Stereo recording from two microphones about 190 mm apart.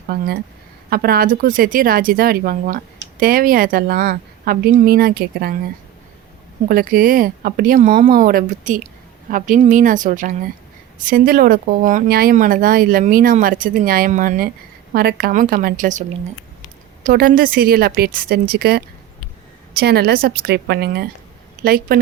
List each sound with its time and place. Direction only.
0.1 s speech: 55° right (ahead or behind)
6.7 s speech: 50° right (ahead or behind)